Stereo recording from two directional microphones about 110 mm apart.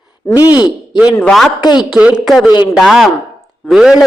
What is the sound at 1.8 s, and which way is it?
A man's voice, 5° right (ahead or behind).